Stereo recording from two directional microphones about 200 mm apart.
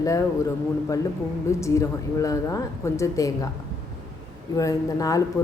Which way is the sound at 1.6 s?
15° left (ahead or behind).